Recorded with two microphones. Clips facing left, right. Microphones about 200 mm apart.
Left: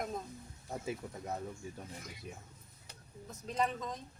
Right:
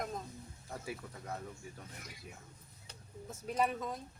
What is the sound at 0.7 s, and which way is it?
Speech, 20° left (ahead or behind).